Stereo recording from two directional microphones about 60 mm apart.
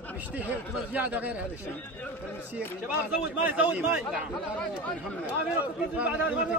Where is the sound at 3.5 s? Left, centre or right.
Right.